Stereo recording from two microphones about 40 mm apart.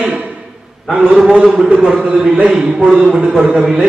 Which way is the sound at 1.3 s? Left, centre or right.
Right.